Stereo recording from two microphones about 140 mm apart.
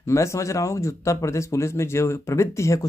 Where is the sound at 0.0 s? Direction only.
20° left (ahead or behind).